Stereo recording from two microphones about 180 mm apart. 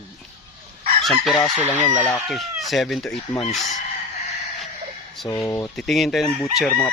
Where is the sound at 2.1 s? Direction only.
Centre (ahead or behind).